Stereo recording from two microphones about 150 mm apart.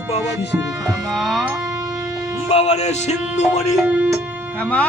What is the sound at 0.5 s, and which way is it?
Music, 15° right (ahead or behind).